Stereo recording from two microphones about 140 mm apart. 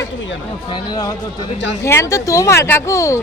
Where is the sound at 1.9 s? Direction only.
20° left (ahead or behind).